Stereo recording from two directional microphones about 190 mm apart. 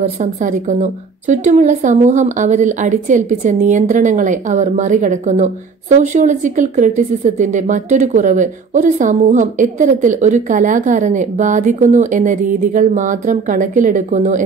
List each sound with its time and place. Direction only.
0.0 s a woman's voice: 40° right (ahead or behind)